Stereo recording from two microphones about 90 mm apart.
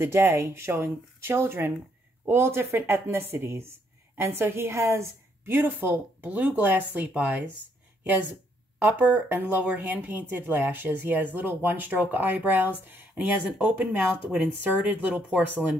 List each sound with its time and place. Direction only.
0.0 s a woman's voice: 25° right (ahead or behind)